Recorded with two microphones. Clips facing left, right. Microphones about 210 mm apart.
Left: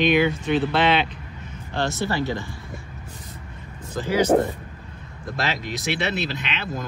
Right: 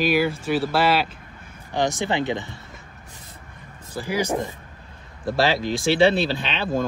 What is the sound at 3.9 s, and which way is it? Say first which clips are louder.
Speech: left 3 dB; 10° right (ahead or behind).